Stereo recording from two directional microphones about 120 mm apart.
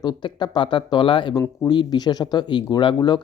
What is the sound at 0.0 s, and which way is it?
Speech, 35° left (ahead or behind).